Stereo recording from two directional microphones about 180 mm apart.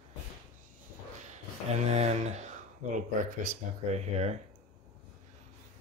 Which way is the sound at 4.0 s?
35° right (ahead or behind).